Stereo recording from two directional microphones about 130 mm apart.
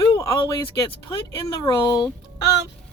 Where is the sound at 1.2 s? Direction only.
35° left (ahead or behind).